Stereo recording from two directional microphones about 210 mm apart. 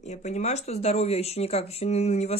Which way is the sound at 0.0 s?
35° left (ahead or behind).